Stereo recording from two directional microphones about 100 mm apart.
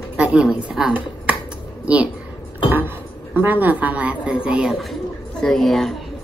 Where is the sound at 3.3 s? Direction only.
20° right (ahead or behind).